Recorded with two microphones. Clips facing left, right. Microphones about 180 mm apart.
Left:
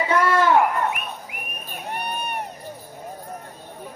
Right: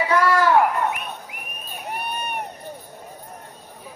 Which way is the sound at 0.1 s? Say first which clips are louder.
Even; 25° left (ahead or behind).